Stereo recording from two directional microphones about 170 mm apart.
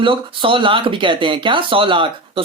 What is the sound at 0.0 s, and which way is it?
Speech, 30° right (ahead or behind).